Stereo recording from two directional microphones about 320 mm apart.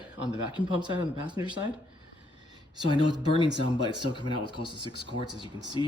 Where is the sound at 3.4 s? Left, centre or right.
Centre.